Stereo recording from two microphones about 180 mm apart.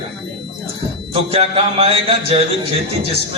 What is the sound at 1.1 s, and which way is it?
A man's voice, 35° right (ahead or behind).